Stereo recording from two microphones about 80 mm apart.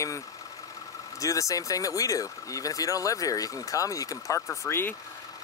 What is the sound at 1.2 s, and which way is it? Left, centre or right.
Speech, left.